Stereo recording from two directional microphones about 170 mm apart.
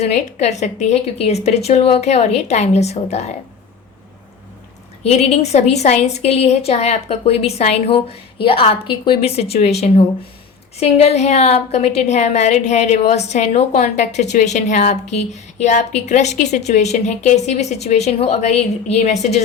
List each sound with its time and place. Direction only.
0.0 s a woman's voice: 40° left (ahead or behind)
5.0 s a woman's voice: 40° left (ahead or behind)